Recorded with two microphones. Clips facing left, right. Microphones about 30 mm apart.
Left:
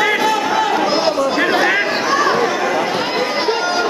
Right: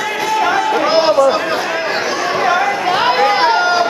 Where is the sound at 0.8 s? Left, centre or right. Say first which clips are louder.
Right 4 dB; centre.